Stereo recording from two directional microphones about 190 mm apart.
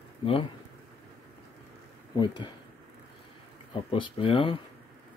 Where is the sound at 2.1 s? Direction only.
25° left (ahead or behind).